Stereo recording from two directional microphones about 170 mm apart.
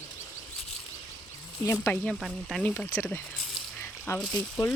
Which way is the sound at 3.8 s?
15° left (ahead or behind).